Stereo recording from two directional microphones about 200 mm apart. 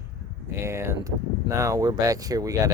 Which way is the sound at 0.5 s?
15° right (ahead or behind).